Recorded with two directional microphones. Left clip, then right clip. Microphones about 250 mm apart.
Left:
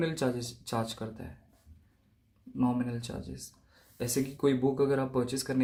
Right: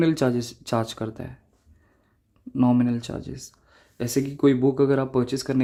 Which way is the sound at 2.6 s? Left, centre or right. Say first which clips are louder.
Right 10 dB; right.